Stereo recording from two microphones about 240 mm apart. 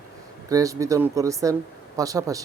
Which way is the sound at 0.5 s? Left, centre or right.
Centre.